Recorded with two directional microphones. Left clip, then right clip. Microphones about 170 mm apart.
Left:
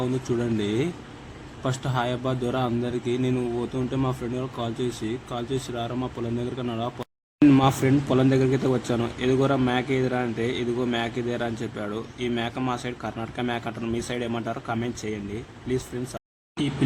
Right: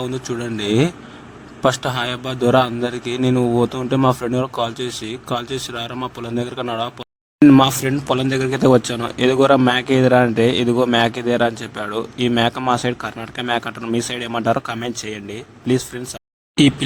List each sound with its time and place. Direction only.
0.0 s a man's voice: 35° right (ahead or behind)
7.3 s a sound: 20° right (ahead or behind)
7.6 s a man's voice: 40° right (ahead or behind)